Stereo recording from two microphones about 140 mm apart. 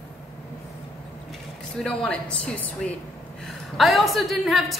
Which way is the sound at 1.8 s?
5° left (ahead or behind).